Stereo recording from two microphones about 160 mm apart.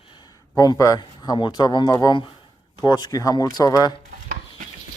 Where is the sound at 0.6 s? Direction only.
20° left (ahead or behind).